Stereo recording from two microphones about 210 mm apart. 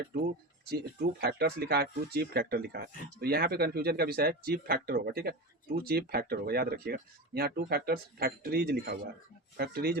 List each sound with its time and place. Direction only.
0.6 s speech: 45° right (ahead or behind)